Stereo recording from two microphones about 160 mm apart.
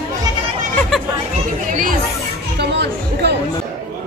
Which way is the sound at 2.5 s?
90° right.